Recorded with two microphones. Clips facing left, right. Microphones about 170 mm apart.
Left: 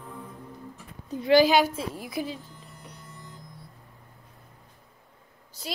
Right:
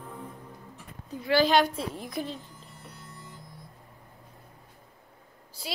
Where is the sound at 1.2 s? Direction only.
15° left (ahead or behind).